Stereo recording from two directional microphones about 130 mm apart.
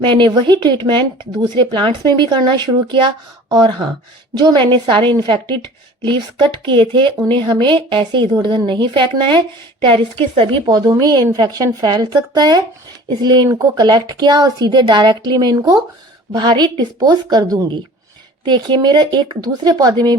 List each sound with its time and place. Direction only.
0.0 s a woman's voice: 40° right (ahead or behind)